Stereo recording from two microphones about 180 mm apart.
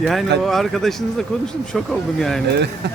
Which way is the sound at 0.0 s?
Centre (ahead or behind).